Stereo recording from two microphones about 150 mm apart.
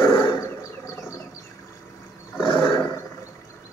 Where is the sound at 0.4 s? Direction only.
20° left (ahead or behind).